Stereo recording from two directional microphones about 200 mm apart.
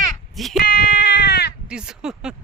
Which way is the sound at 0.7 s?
50° left (ahead or behind).